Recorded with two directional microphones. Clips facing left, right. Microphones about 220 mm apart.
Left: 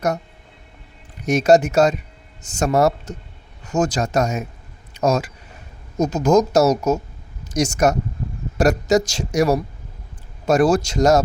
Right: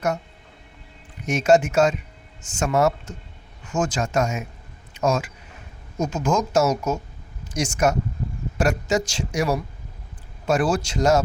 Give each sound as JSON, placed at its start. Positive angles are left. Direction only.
{"t": 1.3, "sound": "speech", "side_deg": 40}